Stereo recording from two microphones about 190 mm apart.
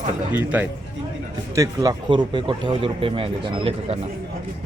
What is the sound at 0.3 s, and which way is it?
A man's voice, 10° right (ahead or behind).